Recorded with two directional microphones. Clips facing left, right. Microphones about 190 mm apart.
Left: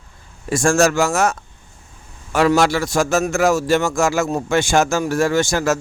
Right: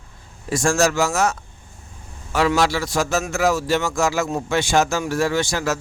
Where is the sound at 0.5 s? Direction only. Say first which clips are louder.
Left 3 dB; 50° left (ahead or behind).